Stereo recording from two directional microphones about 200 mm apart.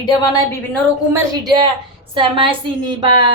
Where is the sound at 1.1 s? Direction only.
15° right (ahead or behind).